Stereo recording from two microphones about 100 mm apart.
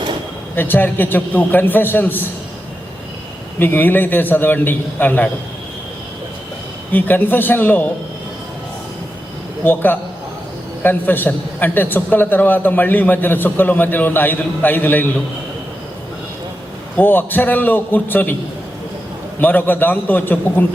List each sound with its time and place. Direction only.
0.5 s a man's voice: 20° left (ahead or behind)
3.6 s a man's voice: 20° left (ahead or behind)
6.9 s a man's voice: 20° left (ahead or behind)
9.6 s a man's voice: 20° left (ahead or behind)
17.0 s a man's voice: 20° left (ahead or behind)
19.4 s a man's voice: 20° left (ahead or behind)